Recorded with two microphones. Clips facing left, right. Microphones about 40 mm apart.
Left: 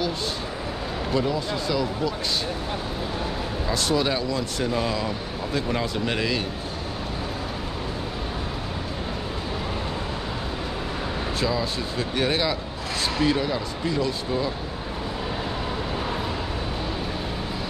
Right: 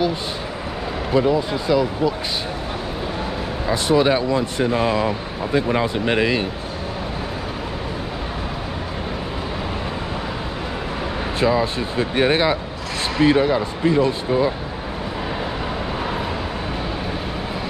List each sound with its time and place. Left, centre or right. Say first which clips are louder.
1.1 s speech: right 7 dB; centre
3.6 s speech: right 7 dB; right
11.3 s speech: right 8 dB; right